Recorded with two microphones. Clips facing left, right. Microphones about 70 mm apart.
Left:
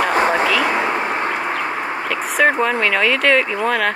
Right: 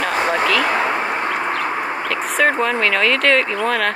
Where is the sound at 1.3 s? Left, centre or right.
Centre.